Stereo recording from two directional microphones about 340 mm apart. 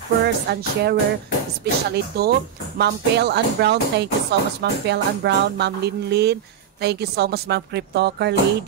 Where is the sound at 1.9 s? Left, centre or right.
Right.